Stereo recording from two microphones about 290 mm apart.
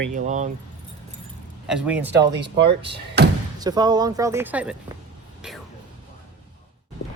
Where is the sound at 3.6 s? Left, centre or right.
Centre.